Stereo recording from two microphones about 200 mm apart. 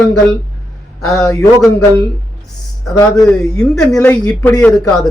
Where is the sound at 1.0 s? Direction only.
15° left (ahead or behind).